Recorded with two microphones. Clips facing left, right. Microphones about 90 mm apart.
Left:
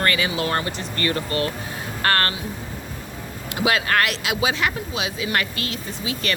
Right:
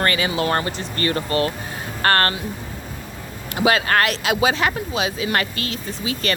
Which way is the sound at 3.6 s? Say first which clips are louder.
Right 3 dB; 40° right (ahead or behind).